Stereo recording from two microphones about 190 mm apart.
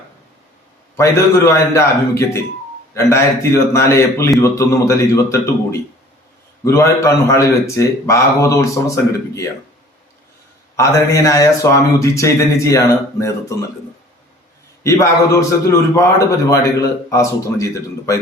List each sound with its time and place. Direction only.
0.9 s a man's voice: 15° left (ahead or behind)
10.8 s a man's voice: 15° left (ahead or behind)
14.8 s a man's voice: 15° left (ahead or behind)